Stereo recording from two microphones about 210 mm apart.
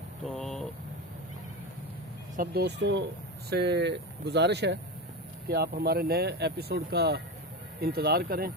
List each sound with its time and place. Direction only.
0.3 s vehicle: centre (ahead or behind)
2.3 s speech: 45° right (ahead or behind)